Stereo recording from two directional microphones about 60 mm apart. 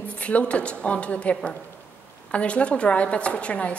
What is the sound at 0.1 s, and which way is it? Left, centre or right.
A woman's voice, left.